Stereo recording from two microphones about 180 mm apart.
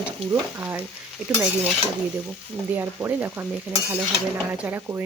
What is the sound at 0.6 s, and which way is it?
Dishes, 10° right (ahead or behind).